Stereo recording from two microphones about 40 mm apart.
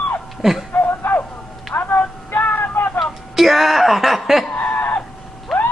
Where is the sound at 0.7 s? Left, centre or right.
Left.